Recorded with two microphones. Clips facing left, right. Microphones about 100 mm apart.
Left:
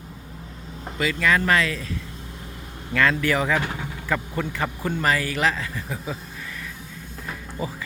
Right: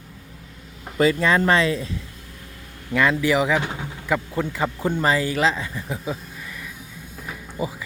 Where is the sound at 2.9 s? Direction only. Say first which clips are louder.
Right 2 dB; 15° right (ahead or behind).